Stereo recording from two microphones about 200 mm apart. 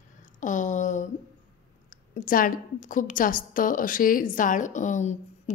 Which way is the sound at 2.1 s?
45° left (ahead or behind).